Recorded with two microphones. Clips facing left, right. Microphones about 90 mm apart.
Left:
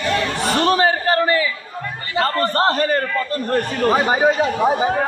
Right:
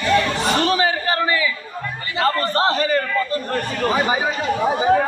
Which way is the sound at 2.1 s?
45° left (ahead or behind).